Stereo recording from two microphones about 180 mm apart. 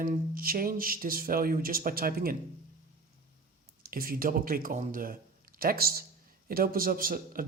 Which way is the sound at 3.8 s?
55° right (ahead or behind).